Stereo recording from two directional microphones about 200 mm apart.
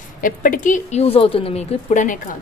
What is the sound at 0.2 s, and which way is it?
Speech, 45° left (ahead or behind).